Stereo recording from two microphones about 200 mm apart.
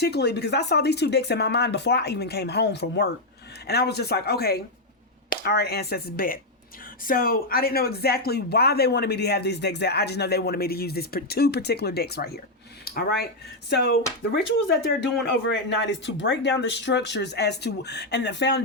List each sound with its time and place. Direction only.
0.0 s speech: 55° left (ahead or behind)